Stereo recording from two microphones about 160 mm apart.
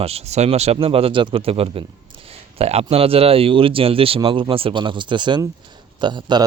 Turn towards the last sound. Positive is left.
turn(degrees=-25)  # may be behind; listen again after turning